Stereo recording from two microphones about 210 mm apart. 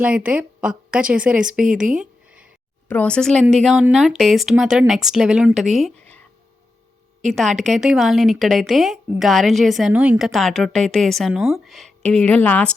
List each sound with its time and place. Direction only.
0.0 s speech: 5° right (ahead or behind)
1.8 s a sound: 5° right (ahead or behind)
2.9 s speech: 5° left (ahead or behind)